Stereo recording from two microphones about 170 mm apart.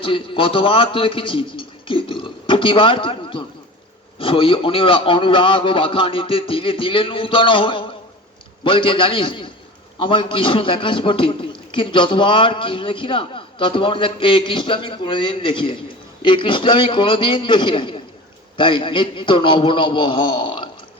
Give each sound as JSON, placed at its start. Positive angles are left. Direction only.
{"t": 0.0, "sound": "a man's voice", "side_deg": 30}